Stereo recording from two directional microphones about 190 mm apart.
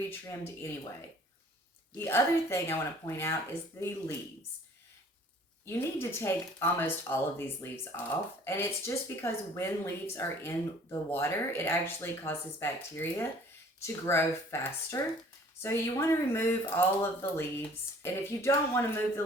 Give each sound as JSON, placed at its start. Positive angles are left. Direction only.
{"t": 0.1, "sound": "speech", "side_deg": 15}
{"t": 2.0, "sound": "speech", "side_deg": 10}
{"t": 5.6, "sound": "speech", "side_deg": 15}